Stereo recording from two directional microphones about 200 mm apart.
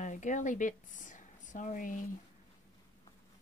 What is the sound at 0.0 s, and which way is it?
Speech, 40° left (ahead or behind).